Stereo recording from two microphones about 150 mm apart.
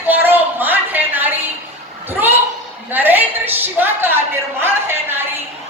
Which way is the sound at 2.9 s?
10° right (ahead or behind).